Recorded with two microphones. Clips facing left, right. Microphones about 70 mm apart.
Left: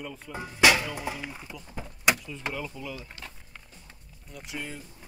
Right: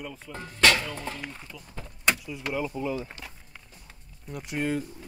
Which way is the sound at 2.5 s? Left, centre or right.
Right.